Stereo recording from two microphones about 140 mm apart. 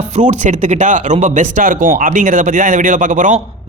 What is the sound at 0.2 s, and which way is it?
Speech, 60° right (ahead or behind).